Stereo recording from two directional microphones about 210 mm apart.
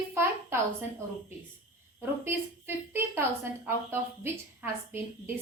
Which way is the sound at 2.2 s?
10° right (ahead or behind).